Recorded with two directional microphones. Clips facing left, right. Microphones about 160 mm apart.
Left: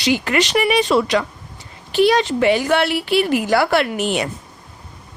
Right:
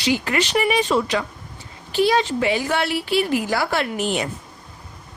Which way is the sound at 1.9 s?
70° left (ahead or behind).